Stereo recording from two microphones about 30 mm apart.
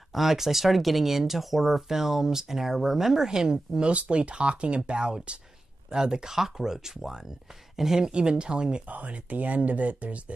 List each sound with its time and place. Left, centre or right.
0.1 s speech: centre
3.3 s speech: right
3.9 s speech: right; by 8.1 s centre
8.1 s speech: right
8.9 s speech: right